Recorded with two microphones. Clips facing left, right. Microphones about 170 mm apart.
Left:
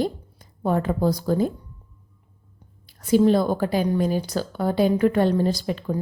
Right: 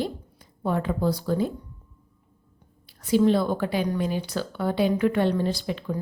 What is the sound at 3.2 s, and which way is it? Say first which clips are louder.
A woman's voice: left 2 dB; 40° left (ahead or behind).